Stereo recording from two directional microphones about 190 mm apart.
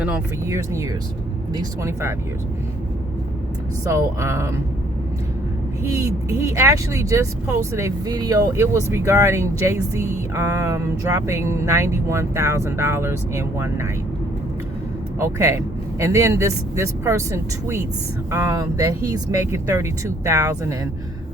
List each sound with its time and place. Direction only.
0.0 s speech: 10° right (ahead or behind)
3.8 s speech: 15° right (ahead or behind)
5.9 s speech: 15° right (ahead or behind)
15.2 s speech: 15° right (ahead or behind)